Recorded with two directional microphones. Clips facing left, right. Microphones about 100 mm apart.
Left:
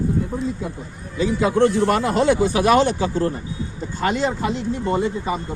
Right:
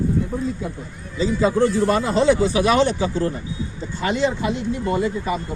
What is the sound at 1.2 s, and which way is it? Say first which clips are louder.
Speech: left 1 dB; 70° left (ahead or behind).